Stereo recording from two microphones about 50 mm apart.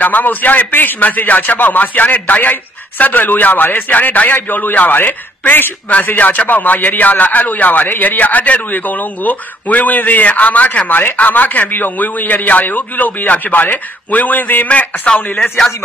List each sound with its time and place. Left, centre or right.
0.0 s a man's voice: left
5.9 s a man's voice: left
15.3 s speech: centre